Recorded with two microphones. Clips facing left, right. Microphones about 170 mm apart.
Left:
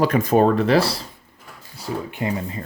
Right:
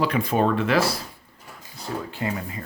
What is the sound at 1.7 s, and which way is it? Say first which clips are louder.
Speech: left 3 dB; 15° left (ahead or behind).